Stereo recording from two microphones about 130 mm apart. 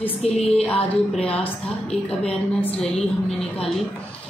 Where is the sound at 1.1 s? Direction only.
10° left (ahead or behind).